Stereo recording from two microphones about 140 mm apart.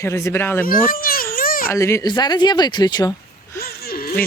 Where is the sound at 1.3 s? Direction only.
90° left.